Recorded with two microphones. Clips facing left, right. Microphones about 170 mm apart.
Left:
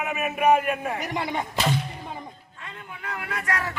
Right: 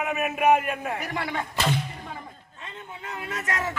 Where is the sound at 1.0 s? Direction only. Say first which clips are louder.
Left 2 dB; 20° left (ahead or behind).